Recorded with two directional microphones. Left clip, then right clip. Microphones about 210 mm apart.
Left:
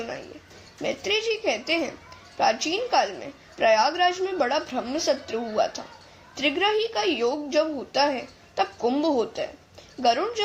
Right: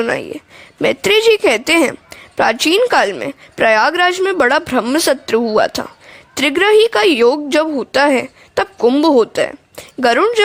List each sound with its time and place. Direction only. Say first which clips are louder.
0.8 s a woman's voice: right 13 dB; 50° right (ahead or behind)